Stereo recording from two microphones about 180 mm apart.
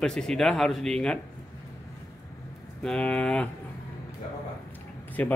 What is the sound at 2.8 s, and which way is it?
Speech, 5° left (ahead or behind).